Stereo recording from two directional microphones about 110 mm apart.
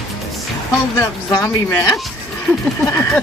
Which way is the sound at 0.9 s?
25° left (ahead or behind).